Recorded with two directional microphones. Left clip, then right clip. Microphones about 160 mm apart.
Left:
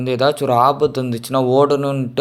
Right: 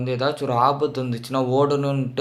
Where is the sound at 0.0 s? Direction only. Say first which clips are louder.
Left 7 dB; 45° left (ahead or behind).